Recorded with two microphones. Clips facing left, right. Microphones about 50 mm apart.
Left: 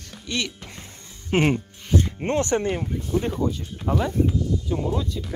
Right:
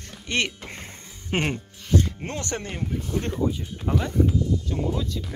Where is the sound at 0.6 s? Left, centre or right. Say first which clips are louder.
Right 3 dB; right.